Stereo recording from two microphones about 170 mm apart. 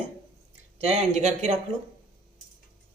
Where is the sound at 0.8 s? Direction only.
40° right (ahead or behind).